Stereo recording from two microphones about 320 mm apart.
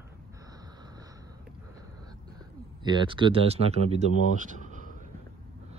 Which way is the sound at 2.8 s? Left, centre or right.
Centre.